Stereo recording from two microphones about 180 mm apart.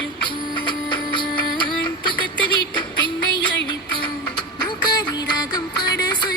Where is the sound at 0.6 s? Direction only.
25° left (ahead or behind).